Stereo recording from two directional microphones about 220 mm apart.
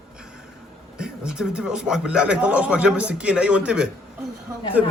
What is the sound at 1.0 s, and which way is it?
A man's voice, 5° right (ahead or behind).